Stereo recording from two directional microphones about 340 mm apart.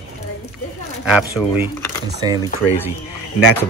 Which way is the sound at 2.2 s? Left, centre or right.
Centre.